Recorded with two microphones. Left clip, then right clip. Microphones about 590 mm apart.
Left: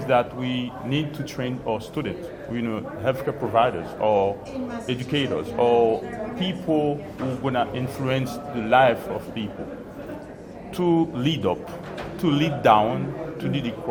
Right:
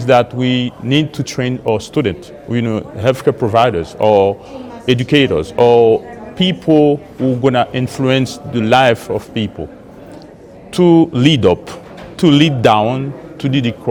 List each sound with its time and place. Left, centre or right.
0.1 s a man's voice: right
10.8 s a man's voice: right